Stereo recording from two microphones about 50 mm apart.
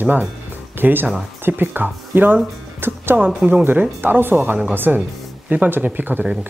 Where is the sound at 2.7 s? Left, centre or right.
Right.